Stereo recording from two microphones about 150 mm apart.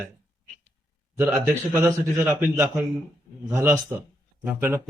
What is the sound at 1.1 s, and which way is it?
A man's voice, 15° right (ahead or behind).